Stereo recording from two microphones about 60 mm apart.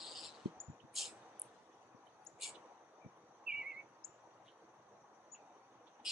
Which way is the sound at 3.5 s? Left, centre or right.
Centre.